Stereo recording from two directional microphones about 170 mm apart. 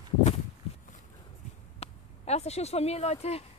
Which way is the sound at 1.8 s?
40° left (ahead or behind).